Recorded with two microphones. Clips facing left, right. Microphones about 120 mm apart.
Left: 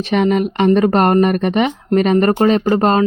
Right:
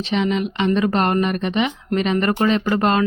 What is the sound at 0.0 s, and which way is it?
Speech, 50° left (ahead or behind).